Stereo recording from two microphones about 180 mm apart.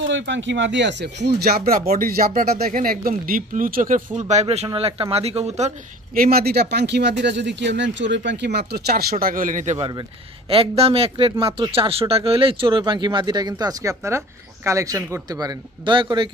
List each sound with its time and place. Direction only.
0.0 s speech: 90° right; by 5.7 s 35° right (ahead or behind)
6.1 s speech: 55° right (ahead or behind)
9.1 s speech: 50° right (ahead or behind)
9.8 s speech: 20° right (ahead or behind)
10.5 s speech: 30° right (ahead or behind)